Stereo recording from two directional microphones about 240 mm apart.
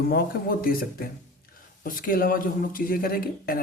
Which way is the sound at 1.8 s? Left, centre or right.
Left.